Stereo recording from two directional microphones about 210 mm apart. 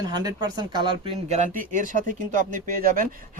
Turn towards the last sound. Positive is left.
turn(degrees=-40)  # may be behind; listen again after turning